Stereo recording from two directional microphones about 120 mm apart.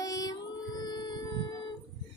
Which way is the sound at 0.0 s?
30° left (ahead or behind).